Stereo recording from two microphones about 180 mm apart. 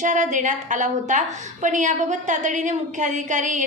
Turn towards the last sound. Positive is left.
turn(degrees=-45)  # may be behind; listen again after turning